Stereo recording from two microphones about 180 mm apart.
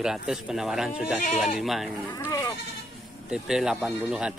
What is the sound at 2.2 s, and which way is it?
Speech, 20° left (ahead or behind).